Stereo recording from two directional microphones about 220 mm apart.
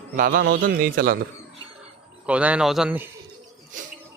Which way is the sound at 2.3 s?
5° right (ahead or behind).